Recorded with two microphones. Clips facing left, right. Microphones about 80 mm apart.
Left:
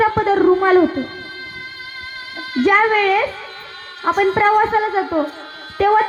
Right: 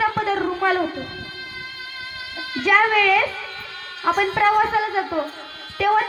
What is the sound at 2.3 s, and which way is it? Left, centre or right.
A woman's voice, left.